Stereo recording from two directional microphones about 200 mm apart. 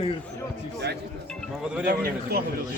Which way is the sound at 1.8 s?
50° right (ahead or behind).